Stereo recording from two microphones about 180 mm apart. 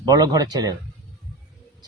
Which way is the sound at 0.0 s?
20° right (ahead or behind).